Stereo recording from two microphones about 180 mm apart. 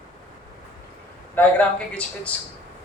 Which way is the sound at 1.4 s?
10° left (ahead or behind).